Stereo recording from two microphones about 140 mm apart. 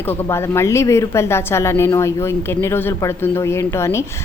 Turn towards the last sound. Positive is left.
turn(degrees=20)  # may be behind; listen again after turning